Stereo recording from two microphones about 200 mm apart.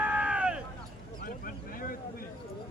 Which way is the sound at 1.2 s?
45° left (ahead or behind).